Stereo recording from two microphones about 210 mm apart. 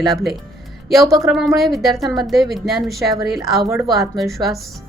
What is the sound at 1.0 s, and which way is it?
Speech, 15° right (ahead or behind).